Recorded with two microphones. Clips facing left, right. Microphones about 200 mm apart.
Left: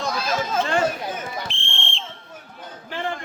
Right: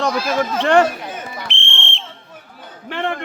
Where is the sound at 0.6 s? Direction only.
75° right (ahead or behind).